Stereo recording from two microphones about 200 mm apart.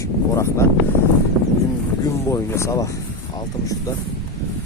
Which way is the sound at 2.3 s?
15° left (ahead or behind).